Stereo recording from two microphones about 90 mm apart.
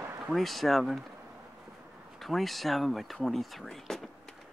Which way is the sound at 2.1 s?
Centre (ahead or behind).